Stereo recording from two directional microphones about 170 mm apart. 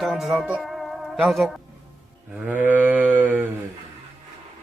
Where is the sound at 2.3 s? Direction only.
10° right (ahead or behind).